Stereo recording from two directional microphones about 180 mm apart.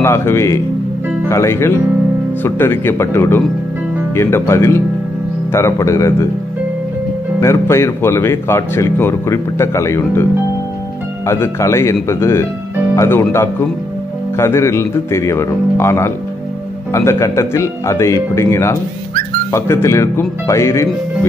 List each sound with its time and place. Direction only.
0.0 s speech: 15° left (ahead or behind)
7.3 s speech: 15° left (ahead or behind)
11.2 s speech: 15° left (ahead or behind)